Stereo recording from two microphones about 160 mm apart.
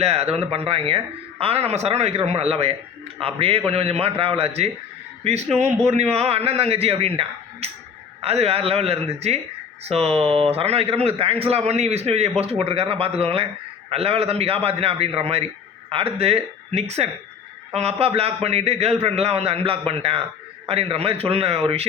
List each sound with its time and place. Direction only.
0.0 s speech: 40° right (ahead or behind)